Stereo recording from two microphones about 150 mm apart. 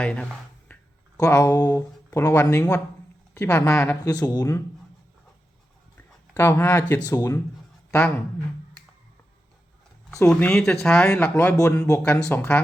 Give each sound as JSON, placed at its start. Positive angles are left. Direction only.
{"t": 0.0, "sound": "speech", "side_deg": 5}
{"t": 1.2, "sound": "speech", "side_deg": 20}
{"t": 6.0, "sound": "speech", "side_deg": 15}
{"t": 7.9, "sound": "speech", "side_deg": 5}
{"t": 10.2, "sound": "speech", "side_deg": 5}
{"t": 11.5, "sound": "speech", "side_deg": 20}
{"t": 11.9, "sound": "speech", "side_deg": 10}